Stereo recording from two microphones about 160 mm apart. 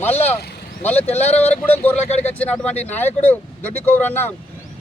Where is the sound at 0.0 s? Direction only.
10° left (ahead or behind).